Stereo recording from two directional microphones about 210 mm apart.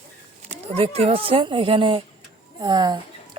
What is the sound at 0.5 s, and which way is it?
Speech, 30° right (ahead or behind).